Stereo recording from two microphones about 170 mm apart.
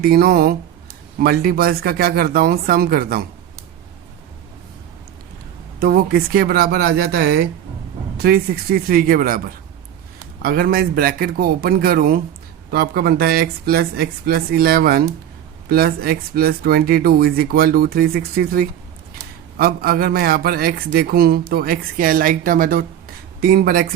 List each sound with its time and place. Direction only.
0.0 s speech: 65° right (ahead or behind)
5.8 s speech: 65° right (ahead or behind)
10.4 s speech: 60° right (ahead or behind)